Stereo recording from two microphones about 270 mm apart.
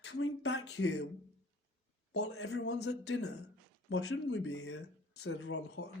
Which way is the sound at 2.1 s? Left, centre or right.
Left.